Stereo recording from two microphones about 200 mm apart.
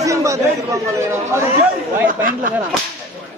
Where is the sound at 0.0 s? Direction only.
15° right (ahead or behind).